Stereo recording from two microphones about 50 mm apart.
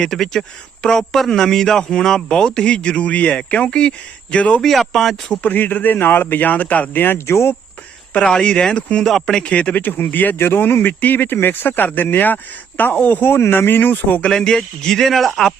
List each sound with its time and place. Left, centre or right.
0.0 s a man's voice: centre; by 4.6 s left
4.6 s speech: centre
5.4 s speech: left
7.3 s speech: left
8.1 s a man's voice: centre
9.4 s speech: left
9.7 s speech: left
10.3 s speech: left
13.2 s speech: left
14.3 s a man's voice: centre